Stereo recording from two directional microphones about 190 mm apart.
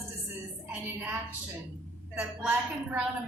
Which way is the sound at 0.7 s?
10° right (ahead or behind).